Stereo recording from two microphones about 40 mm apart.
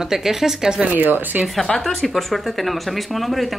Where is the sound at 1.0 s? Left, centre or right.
Right.